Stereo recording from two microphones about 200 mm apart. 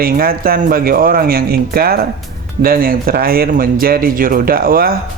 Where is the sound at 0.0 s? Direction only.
50° right (ahead or behind).